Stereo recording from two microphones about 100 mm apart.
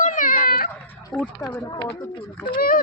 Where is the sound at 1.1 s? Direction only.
10° left (ahead or behind).